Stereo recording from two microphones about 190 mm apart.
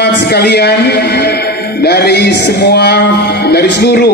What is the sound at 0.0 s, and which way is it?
A man's voice, 60° left (ahead or behind).